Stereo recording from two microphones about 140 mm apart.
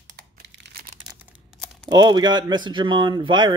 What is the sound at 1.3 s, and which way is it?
Crumpling, 5° right (ahead or behind).